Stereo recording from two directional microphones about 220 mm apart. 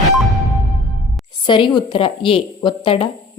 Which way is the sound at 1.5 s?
20° left (ahead or behind).